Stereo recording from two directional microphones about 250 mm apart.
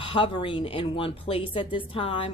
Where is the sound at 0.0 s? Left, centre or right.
Left.